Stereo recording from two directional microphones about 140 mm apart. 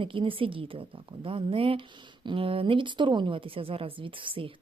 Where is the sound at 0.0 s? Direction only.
35° right (ahead or behind).